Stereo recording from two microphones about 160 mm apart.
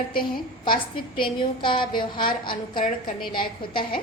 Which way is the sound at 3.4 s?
65° left (ahead or behind).